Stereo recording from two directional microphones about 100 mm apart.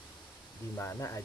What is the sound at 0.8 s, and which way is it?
Speech, 25° left (ahead or behind).